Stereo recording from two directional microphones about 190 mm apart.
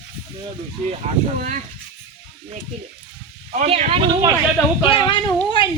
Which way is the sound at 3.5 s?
35° right (ahead or behind).